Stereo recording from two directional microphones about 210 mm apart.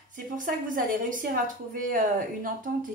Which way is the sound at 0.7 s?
40° right (ahead or behind).